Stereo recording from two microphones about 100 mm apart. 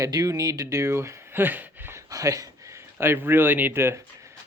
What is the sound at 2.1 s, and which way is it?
Speech, 35° right (ahead or behind).